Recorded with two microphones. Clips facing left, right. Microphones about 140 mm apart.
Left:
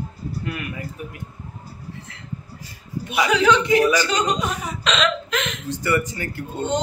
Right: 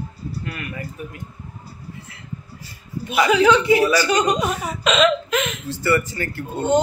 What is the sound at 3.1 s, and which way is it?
Speech, centre (ahead or behind).